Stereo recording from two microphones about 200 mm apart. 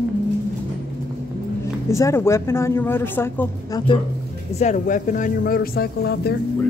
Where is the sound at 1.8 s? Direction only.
15° left (ahead or behind).